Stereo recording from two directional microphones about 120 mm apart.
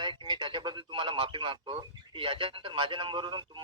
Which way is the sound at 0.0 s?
45° right (ahead or behind).